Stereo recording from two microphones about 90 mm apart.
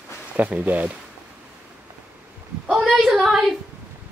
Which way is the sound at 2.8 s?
Centre (ahead or behind).